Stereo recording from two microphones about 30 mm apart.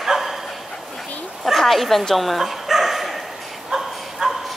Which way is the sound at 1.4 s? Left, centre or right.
Centre.